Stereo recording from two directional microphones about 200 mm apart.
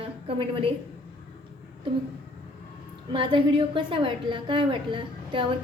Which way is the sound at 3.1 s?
25° right (ahead or behind).